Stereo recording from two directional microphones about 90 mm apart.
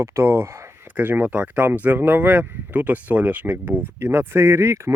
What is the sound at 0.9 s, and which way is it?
Speech, 15° right (ahead or behind).